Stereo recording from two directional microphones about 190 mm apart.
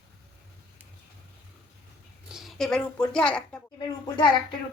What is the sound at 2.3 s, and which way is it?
A woman's voice, centre (ahead or behind).